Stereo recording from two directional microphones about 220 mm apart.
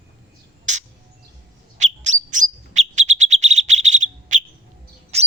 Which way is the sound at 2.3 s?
35° right (ahead or behind).